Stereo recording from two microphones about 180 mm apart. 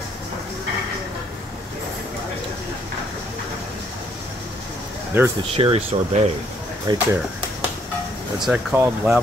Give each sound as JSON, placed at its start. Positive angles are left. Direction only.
{"t": 5.1, "sound": "speech", "side_deg": -10}
{"t": 5.6, "sound": "speech", "side_deg": -30}
{"t": 8.4, "sound": "speech", "side_deg": 0}